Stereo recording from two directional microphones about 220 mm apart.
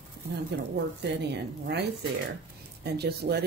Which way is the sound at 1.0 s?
50° right (ahead or behind).